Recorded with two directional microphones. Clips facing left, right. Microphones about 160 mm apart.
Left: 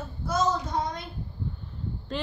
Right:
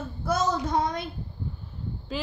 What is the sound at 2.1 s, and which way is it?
Speech, 5° right (ahead or behind).